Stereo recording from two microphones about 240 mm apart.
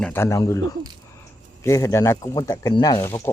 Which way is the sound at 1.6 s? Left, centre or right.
Centre.